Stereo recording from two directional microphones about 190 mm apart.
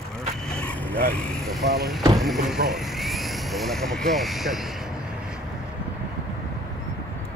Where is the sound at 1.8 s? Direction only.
Centre (ahead or behind).